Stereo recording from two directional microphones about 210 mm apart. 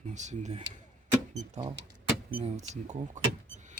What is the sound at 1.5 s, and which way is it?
Speech, 25° right (ahead or behind).